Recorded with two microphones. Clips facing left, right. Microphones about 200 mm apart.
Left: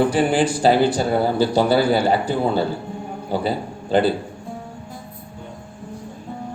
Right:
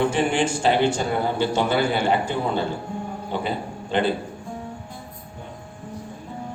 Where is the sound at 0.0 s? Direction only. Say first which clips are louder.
Left 4 dB; 35° left (ahead or behind).